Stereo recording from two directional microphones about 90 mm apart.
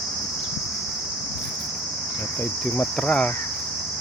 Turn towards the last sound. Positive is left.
turn(degrees=10)  # may be behind; listen again after turning